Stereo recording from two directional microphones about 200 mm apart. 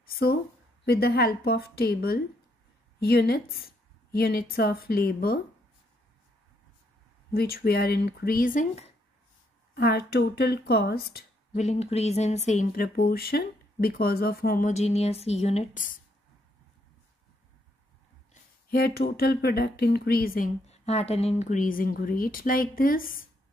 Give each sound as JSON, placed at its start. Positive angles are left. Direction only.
{"t": 0.0, "sound": "a sound", "side_deg": 50}
{"t": 0.8, "sound": "a woman's voice", "side_deg": 50}
{"t": 7.3, "sound": "a woman's voice", "side_deg": 50}
{"t": 9.8, "sound": "a woman's voice", "side_deg": 55}
{"t": 11.5, "sound": "a woman's voice", "side_deg": 35}
{"t": 14.7, "sound": "speech", "side_deg": 35}
{"t": 18.3, "sound": "a sound", "side_deg": 50}
{"t": 19.4, "sound": "a woman's voice", "side_deg": 55}